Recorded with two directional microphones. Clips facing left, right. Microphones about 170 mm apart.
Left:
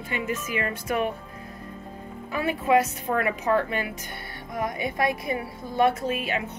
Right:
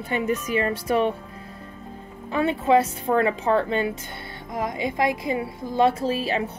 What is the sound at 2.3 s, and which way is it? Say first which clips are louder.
A woman's voice: right 3 dB; 25° right (ahead or behind).